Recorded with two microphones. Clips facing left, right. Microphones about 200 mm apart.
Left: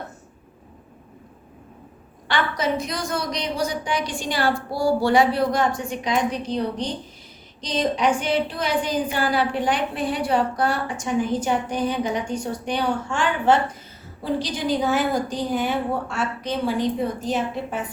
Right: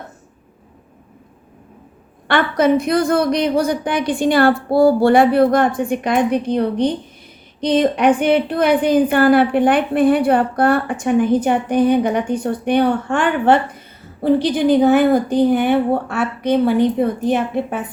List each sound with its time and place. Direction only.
2.2 s a woman's voice: 55° right (ahead or behind)